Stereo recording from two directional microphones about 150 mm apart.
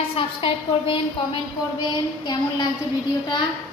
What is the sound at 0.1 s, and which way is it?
Speech, 35° left (ahead or behind).